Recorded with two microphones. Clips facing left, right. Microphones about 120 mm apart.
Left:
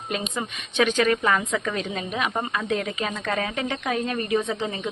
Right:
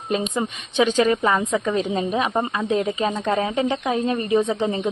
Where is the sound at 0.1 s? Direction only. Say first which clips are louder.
Right 6 dB; 25° right (ahead or behind).